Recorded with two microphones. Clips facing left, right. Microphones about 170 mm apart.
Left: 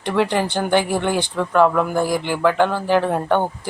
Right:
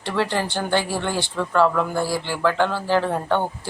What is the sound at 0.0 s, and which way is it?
Speech, 15° left (ahead or behind).